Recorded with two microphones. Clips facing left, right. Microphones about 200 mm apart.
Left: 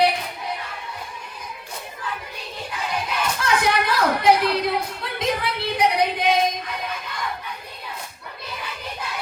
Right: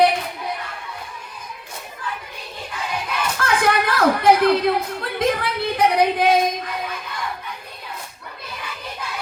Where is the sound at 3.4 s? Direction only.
55° right (ahead or behind).